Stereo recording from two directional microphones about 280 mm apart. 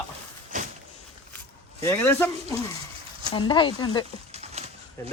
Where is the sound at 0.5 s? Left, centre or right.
Right.